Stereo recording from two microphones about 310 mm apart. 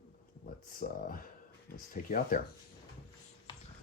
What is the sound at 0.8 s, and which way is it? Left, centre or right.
Speech, left.